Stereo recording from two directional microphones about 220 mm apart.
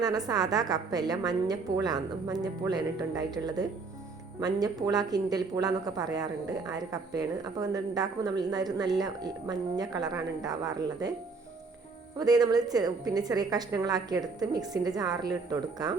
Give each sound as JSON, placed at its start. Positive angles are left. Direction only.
{"t": 0.0, "sound": "speech", "side_deg": -15}
{"t": 12.1, "sound": "speech", "side_deg": -15}